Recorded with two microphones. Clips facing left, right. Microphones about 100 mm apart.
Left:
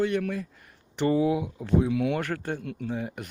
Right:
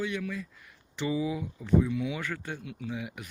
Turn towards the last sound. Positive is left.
turn(degrees=45)  # may be behind; listen again after turning